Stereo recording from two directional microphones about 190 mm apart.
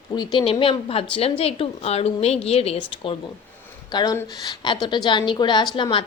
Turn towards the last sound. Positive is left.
turn(degrees=25)  # may be behind; listen again after turning